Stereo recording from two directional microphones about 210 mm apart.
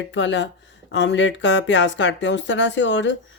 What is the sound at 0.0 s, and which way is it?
Speech, 60° left (ahead or behind).